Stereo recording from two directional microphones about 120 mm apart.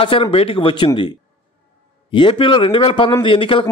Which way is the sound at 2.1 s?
45° left (ahead or behind).